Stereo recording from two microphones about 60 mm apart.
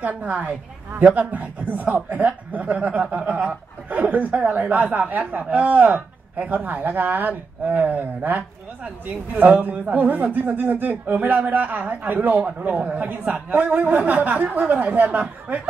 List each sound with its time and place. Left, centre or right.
0.0 s speech: right